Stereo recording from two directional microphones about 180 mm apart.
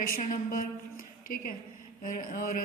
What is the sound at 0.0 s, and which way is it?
Music, 50° left (ahead or behind).